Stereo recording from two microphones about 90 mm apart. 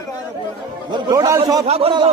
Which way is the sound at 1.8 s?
70° right (ahead or behind).